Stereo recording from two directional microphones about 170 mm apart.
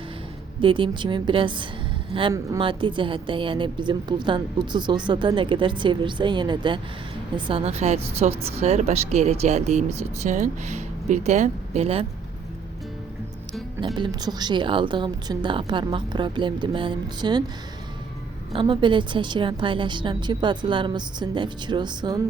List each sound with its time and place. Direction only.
0.6 s a woman's voice: 30° right (ahead or behind)
13.8 s a woman's voice: 25° right (ahead or behind)
18.5 s a woman's voice: 30° right (ahead or behind)